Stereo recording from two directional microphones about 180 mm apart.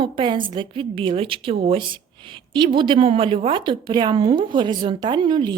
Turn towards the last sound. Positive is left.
turn(degrees=-25)  # may be behind; listen again after turning